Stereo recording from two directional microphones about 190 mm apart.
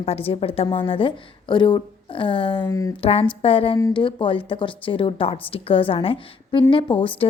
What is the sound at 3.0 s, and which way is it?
A woman's voice, 30° left (ahead or behind).